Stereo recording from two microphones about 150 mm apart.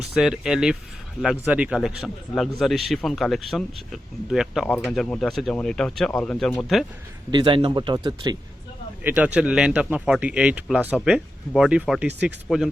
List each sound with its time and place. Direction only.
0.2 s a man's voice: 5° right (ahead or behind)
7.3 s a man's voice: 30° right (ahead or behind)
9.0 s speech: 10° right (ahead or behind)